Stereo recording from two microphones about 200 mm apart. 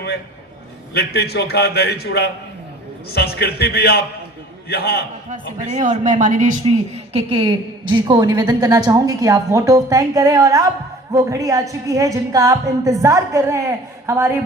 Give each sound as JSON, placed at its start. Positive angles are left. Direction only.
{"t": 0.9, "sound": "a man's voice", "side_deg": 55}
{"t": 5.3, "sound": "a woman's voice", "side_deg": -35}